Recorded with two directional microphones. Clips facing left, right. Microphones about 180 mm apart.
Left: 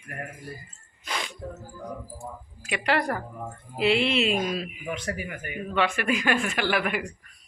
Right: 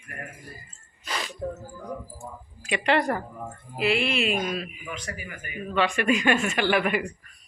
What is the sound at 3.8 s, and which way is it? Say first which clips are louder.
Speech: left 2 dB; 25° left (ahead or behind).